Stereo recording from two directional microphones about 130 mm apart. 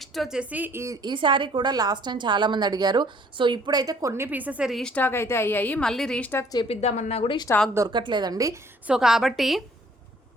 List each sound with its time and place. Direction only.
0.0 s speech: centre (ahead or behind); by 0.9 s 20° right (ahead or behind)
1.0 s a woman's voice: 35° right (ahead or behind); by 4.8 s 10° right (ahead or behind)
4.8 s a woman's voice: 10° left (ahead or behind)
6.7 s speech: 60° left (ahead or behind)
7.9 s a woman's voice: 35° right (ahead or behind)
8.9 s a woman's voice: 5° right (ahead or behind)